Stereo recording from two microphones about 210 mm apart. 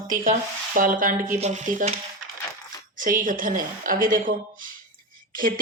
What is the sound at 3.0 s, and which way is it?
A woman's voice, 40° right (ahead or behind).